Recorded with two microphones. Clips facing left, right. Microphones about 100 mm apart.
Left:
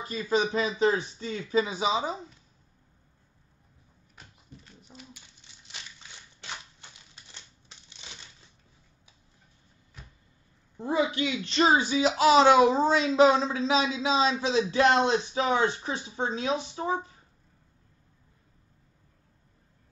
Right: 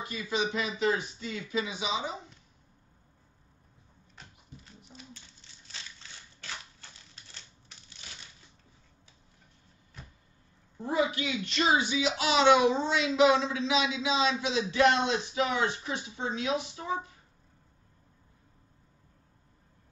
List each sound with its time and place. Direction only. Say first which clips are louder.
0.0 s speech: left 5 dB; 35° left (ahead or behind)
5.7 s crushing: left 1 dB; 15° left (ahead or behind)
10.8 s speech: left 2 dB; 25° left (ahead or behind)